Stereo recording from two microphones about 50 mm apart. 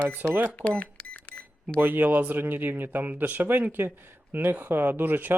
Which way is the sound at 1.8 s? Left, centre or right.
Right.